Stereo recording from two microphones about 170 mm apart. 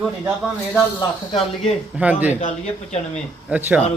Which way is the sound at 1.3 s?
35° left (ahead or behind).